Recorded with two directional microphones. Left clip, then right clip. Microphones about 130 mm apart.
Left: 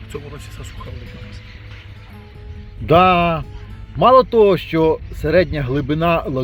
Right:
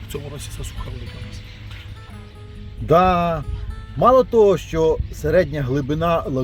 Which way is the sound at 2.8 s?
20° left (ahead or behind).